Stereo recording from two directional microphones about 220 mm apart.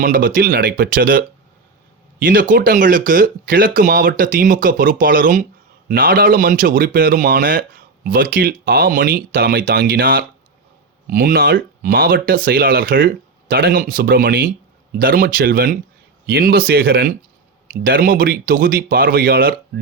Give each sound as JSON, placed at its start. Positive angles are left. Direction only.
{"t": 0.0, "sound": "speech", "side_deg": -40}